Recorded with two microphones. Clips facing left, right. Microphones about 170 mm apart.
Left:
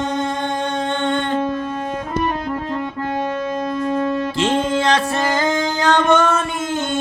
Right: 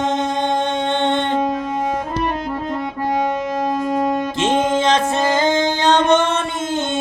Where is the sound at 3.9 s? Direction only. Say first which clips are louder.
Even; 20° right (ahead or behind).